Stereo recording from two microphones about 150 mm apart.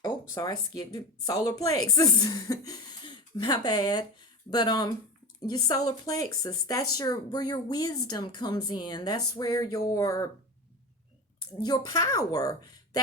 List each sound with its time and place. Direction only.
0.3 s speech: 25° left (ahead or behind)
11.6 s speech: 25° left (ahead or behind)